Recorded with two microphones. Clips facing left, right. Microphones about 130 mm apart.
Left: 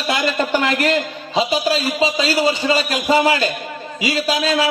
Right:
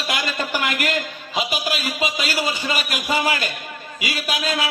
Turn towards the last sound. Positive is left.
turn(degrees=30)  # may be behind; listen again after turning